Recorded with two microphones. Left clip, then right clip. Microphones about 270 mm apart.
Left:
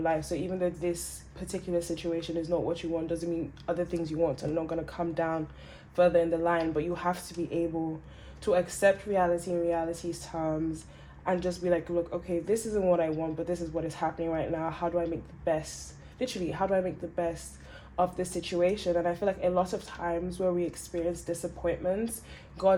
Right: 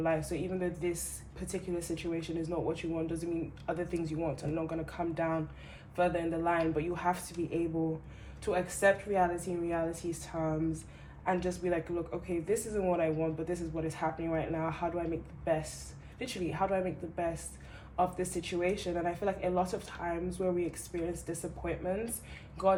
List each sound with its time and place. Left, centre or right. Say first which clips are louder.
0.0 s speech: left 3 dB; left
2.0 s speech: left 4 dB; left